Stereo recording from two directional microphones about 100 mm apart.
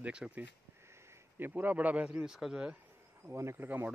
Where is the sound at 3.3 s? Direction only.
25° right (ahead or behind).